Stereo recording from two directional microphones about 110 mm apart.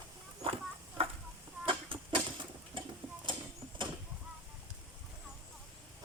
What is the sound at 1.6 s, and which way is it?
Goat, 50° right (ahead or behind).